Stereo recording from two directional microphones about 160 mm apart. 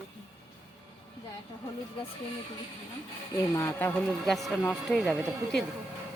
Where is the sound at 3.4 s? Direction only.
15° left (ahead or behind).